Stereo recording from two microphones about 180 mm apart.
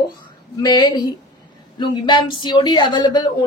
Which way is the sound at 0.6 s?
20° left (ahead or behind).